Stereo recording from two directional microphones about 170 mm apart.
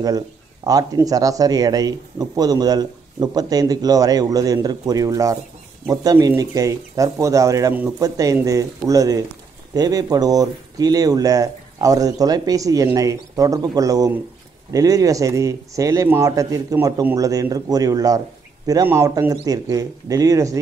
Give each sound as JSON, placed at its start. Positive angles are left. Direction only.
{"t": 0.7, "sound": "speech", "side_deg": -20}